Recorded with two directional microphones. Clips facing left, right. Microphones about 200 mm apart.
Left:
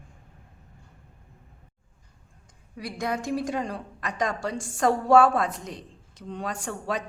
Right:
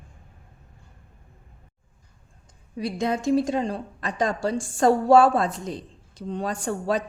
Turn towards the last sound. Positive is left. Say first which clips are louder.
# right 5 dB
turn(degrees=-35)  # may be behind; listen again after turning